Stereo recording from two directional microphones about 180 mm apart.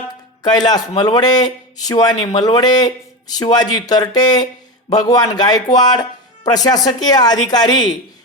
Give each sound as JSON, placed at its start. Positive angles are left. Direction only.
{"t": 0.4, "sound": "speech", "side_deg": 20}